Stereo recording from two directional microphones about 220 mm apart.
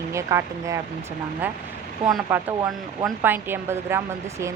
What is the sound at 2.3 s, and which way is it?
Speech, 10° right (ahead or behind).